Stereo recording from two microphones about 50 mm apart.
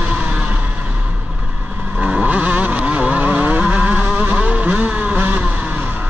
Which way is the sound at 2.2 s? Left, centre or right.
Right.